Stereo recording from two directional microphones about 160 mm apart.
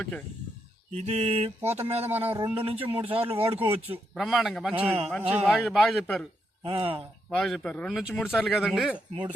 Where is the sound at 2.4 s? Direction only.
35° right (ahead or behind).